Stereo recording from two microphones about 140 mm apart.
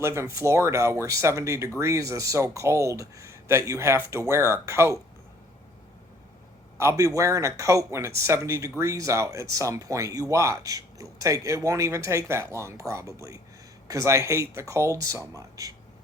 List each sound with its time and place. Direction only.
0.0 s speech: 20° right (ahead or behind)
6.7 s speech: 20° right (ahead or behind)